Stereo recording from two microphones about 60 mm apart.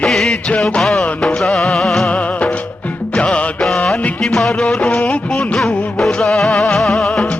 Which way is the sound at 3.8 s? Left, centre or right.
Left.